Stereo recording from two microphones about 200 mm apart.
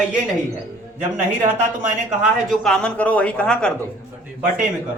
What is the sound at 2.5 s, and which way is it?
A man's voice, 5° left (ahead or behind).